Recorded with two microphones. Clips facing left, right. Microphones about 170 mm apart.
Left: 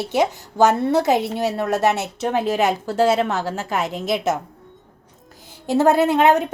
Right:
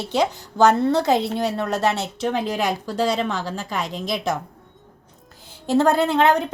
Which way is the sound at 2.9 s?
55° left (ahead or behind).